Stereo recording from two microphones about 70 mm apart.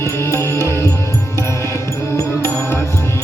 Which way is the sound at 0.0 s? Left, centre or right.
Left.